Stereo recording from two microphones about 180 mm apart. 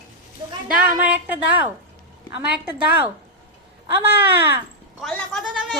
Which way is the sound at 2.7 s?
10° right (ahead or behind).